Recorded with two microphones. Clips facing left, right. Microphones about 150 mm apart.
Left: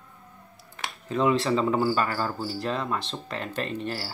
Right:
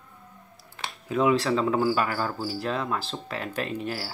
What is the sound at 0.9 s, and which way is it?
Speech, 5° right (ahead or behind).